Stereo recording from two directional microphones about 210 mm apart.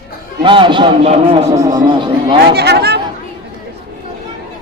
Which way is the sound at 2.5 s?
50° right (ahead or behind).